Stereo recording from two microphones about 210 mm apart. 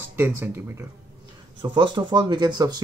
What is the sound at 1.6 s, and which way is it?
Speech, 20° right (ahead or behind).